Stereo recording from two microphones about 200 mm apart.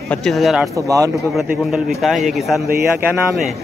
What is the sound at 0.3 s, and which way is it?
Speech, centre (ahead or behind).